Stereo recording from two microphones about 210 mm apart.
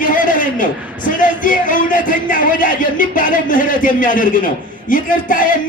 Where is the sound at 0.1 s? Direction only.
40° left (ahead or behind).